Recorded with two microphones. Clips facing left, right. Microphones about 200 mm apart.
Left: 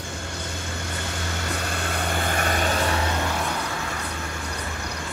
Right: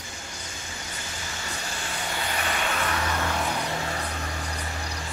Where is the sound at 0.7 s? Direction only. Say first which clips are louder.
Left 6 dB; 65° left (ahead or behind); by 2.8 s 40° left (ahead or behind).